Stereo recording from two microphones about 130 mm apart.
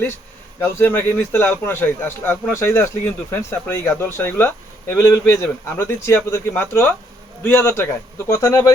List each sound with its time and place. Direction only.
0.6 s a man's voice: 15° left (ahead or behind)